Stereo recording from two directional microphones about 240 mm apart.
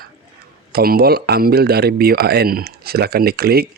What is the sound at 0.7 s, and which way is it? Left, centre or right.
Speech, right.